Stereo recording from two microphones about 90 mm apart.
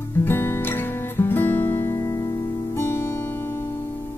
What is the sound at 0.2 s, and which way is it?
Music, 25° left (ahead or behind).